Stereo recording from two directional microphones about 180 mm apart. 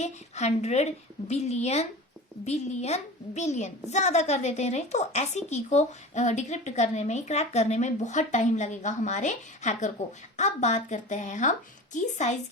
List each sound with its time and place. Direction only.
0.0 s a woman's voice: 40° left (ahead or behind)